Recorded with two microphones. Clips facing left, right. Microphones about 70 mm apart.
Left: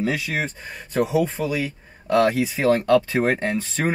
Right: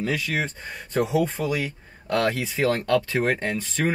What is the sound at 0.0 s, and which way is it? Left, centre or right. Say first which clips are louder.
Speech: left 2 dB; left.